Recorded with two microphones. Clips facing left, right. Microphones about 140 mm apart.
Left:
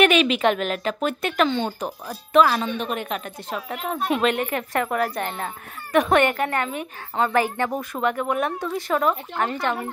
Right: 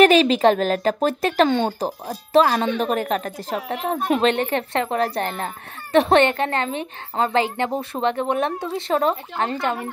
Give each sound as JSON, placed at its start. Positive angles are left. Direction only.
{"t": 0.0, "sound": "speech", "side_deg": -35}
{"t": 1.5, "sound": "speech", "side_deg": -50}
{"t": 1.8, "sound": "speech", "side_deg": -35}